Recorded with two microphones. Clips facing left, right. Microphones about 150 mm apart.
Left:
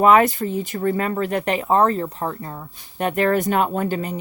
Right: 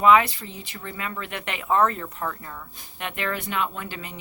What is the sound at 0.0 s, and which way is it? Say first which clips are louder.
Speech: left 4 dB; 45° left (ahead or behind).